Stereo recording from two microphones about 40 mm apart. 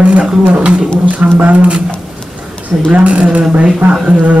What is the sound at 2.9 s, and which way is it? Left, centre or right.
Speech, right.